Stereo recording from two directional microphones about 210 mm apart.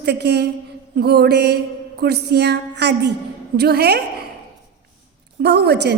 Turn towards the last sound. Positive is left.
turn(degrees=-50)  # may be behind; listen again after turning